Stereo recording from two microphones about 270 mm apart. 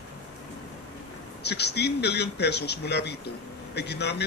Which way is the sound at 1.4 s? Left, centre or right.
Left.